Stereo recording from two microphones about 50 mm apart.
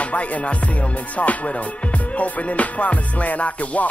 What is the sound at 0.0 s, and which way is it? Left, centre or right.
Music, left.